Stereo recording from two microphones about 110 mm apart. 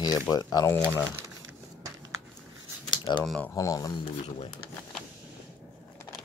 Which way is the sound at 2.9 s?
45° left (ahead or behind).